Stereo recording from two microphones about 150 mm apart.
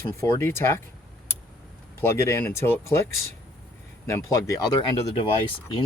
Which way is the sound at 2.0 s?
15° left (ahead or behind).